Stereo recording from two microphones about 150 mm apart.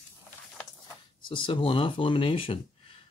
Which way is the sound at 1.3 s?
35° left (ahead or behind).